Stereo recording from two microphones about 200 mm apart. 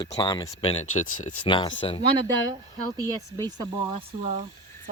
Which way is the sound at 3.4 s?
20° right (ahead or behind).